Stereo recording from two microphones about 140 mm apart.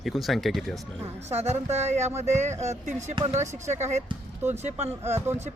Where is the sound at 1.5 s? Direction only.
50° right (ahead or behind).